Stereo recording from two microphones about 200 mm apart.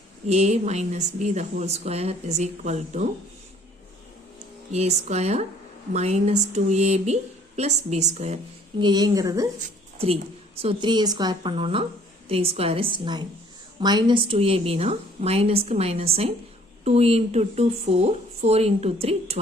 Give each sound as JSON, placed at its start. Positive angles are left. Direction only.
{"t": 0.3, "sound": "a woman's voice", "side_deg": -35}
{"t": 4.7, "sound": "a woman's voice", "side_deg": -35}
{"t": 8.8, "sound": "a woman's voice", "side_deg": -20}
{"t": 9.6, "sound": "a woman's voice", "side_deg": -35}